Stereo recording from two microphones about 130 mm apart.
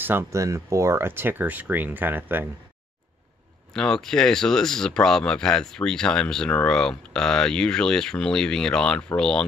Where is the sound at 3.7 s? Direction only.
5° left (ahead or behind).